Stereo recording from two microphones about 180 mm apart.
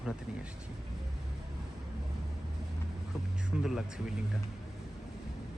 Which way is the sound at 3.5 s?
Centre (ahead or behind).